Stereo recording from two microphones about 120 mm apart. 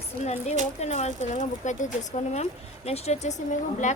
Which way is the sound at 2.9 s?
60° left (ahead or behind).